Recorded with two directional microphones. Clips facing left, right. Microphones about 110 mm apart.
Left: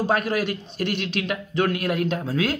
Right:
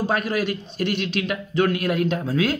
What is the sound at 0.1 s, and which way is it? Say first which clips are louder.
A man's voice: even; 55° left (ahead or behind).